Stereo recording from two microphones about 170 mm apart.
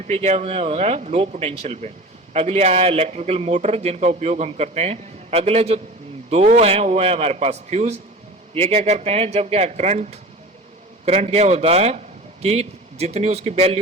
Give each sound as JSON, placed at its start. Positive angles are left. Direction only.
{"t": 0.1, "sound": "a man's voice", "side_deg": -40}